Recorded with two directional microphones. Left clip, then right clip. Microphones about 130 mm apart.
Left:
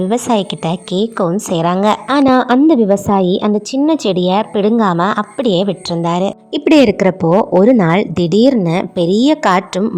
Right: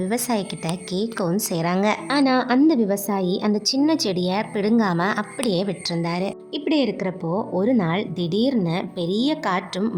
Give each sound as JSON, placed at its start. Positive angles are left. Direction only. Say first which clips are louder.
{"t": 0.0, "sound": "a woman's voice", "louder": "left 9 dB", "side_deg": 40}
{"t": 6.0, "sound": "a woman's voice", "louder": "left 12 dB", "side_deg": 45}
{"t": 6.5, "sound": "a woman's voice", "louder": "left 13 dB", "side_deg": 90}